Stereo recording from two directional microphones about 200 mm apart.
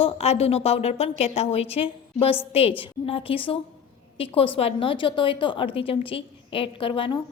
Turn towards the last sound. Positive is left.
turn(degrees=25)  # may be behind; listen again after turning